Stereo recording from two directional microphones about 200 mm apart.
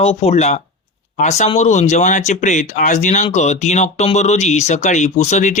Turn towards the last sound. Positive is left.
turn(degrees=35)  # may be behind; listen again after turning